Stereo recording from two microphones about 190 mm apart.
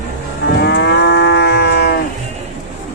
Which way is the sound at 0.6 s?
60° left (ahead or behind).